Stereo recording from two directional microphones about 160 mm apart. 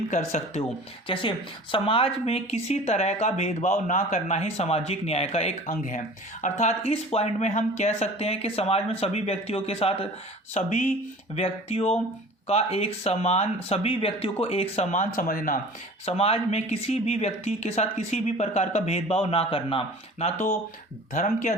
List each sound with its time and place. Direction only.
0.1 s speech: 50° left (ahead or behind)
1.0 s speech: 30° left (ahead or behind)
10.5 s speech: 50° left (ahead or behind)
16.0 s speech: 40° left (ahead or behind)